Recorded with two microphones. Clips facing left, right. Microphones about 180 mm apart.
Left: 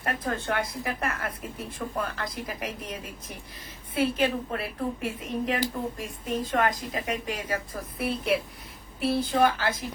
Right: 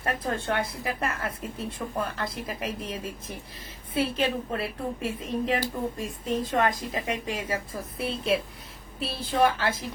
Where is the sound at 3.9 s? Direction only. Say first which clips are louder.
Left 1 dB; 25° right (ahead or behind).